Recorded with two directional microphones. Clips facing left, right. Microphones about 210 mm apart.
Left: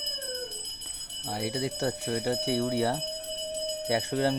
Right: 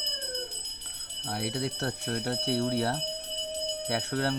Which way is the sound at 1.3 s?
10° left (ahead or behind).